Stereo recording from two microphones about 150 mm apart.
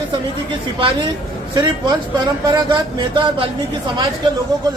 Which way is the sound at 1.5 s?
30° right (ahead or behind).